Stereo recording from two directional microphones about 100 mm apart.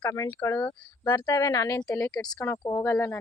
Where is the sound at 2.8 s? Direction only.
30° left (ahead or behind).